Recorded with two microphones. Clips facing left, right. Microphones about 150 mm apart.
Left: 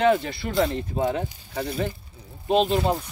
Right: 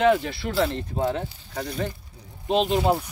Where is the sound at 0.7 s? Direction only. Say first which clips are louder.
Left 1 dB; 10° left (ahead or behind).